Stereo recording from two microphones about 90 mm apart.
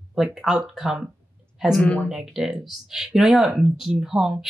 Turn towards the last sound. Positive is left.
turn(degrees=-5)  # may be behind; listen again after turning